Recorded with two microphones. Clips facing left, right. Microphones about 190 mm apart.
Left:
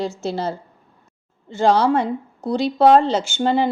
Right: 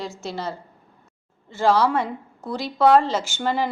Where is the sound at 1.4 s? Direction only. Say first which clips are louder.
Left 3 dB; 25° left (ahead or behind).